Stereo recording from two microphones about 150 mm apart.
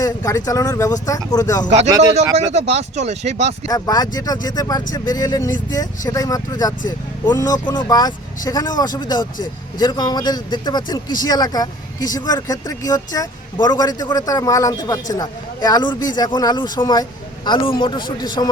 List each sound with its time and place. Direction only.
0.0 s speech: 25° left (ahead or behind)
2.3 s speech: 45° right (ahead or behind)
3.7 s speech: 25° left (ahead or behind)